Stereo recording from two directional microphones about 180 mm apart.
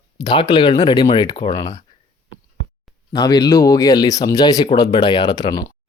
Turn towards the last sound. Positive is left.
turn(degrees=20)  # may be behind; listen again after turning